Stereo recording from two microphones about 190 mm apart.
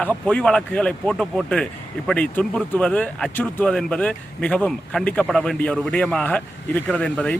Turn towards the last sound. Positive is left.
turn(degrees=5)  # may be behind; listen again after turning